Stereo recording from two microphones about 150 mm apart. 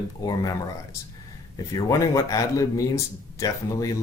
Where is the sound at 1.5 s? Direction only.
25° left (ahead or behind).